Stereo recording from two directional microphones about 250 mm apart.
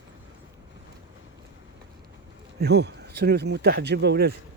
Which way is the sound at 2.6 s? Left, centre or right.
Right.